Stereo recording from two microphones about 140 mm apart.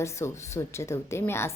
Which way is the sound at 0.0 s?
20° left (ahead or behind).